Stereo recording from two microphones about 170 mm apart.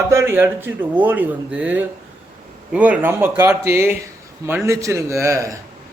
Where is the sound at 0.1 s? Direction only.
15° right (ahead or behind).